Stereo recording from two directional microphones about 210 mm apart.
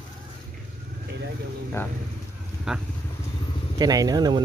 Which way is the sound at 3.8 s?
15° right (ahead or behind).